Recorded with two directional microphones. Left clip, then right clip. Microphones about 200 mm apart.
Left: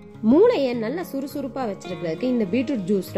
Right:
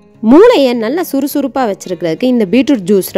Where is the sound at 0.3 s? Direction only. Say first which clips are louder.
Right 12 dB; 45° right (ahead or behind).